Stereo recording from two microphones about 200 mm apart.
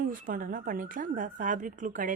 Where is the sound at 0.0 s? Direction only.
40° right (ahead or behind).